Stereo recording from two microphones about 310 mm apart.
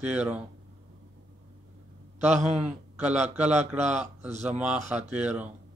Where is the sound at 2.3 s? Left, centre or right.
Right.